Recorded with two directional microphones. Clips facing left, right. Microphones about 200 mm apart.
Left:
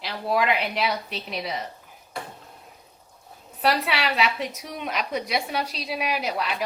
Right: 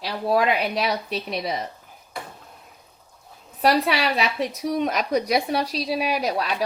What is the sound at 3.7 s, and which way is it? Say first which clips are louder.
A woman's voice: right 4 dB; 30° right (ahead or behind).